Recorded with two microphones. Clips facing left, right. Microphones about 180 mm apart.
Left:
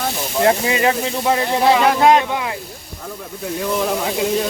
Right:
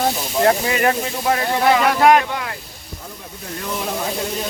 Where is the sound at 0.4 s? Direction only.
20° left (ahead or behind).